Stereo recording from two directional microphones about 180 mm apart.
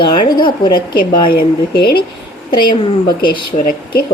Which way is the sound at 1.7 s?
60° left (ahead or behind).